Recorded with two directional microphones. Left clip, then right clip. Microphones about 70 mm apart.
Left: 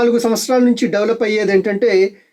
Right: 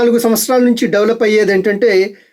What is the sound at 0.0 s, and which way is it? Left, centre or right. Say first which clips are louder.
Speech: right 3 dB; right.